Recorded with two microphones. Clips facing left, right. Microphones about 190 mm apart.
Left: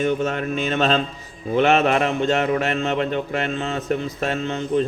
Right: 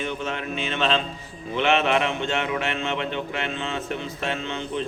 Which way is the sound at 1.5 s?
40° left (ahead or behind).